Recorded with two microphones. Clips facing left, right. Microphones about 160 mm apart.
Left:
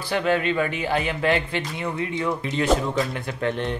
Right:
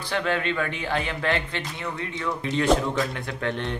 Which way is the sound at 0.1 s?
10° left (ahead or behind).